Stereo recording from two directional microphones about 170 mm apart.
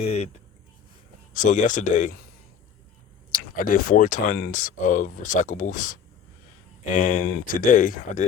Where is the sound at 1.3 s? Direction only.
50° left (ahead or behind).